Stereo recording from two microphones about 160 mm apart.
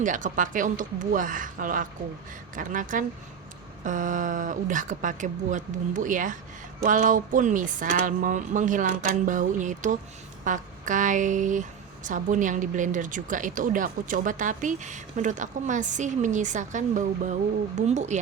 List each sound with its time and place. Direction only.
0.0 s speech: 55° right (ahead or behind)
10.4 s a sound: 50° right (ahead or behind)
12.0 s speech: 55° right (ahead or behind)